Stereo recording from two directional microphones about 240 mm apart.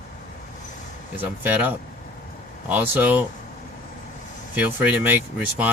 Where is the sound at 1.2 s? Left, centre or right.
Centre.